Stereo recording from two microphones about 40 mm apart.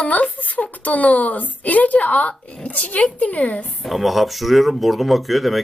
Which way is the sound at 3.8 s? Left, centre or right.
Centre.